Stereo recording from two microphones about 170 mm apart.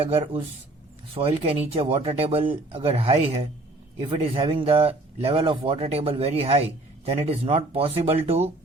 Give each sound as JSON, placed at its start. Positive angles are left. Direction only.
{"t": 0.0, "sound": "speech", "side_deg": -35}